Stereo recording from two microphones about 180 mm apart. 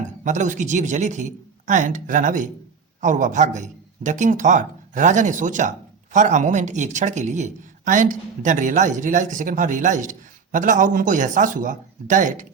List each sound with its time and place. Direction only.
0.3 s speech: 45° right (ahead or behind)